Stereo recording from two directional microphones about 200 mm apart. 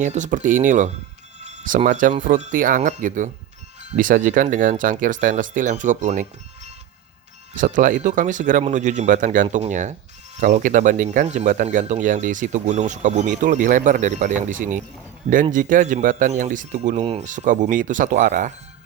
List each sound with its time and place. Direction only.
0.0 s speech: 35° right (ahead or behind)
1.4 s music: 35° right (ahead or behind)
2.2 s speech: 45° right (ahead or behind)
7.5 s speech: 40° right (ahead or behind)